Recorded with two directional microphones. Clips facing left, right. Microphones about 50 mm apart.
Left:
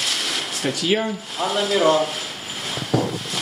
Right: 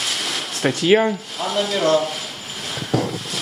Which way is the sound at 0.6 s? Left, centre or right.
Right.